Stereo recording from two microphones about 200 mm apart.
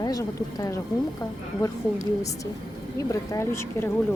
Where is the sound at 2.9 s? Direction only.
15° left (ahead or behind).